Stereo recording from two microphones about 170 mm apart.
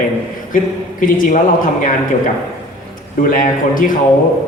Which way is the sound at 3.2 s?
50° left (ahead or behind).